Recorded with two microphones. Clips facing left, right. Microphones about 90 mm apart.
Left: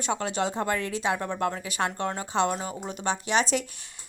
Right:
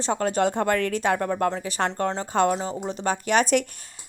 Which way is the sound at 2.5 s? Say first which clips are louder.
Right 5 dB; 30° right (ahead or behind).